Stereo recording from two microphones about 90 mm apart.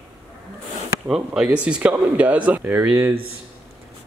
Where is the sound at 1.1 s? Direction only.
5° right (ahead or behind).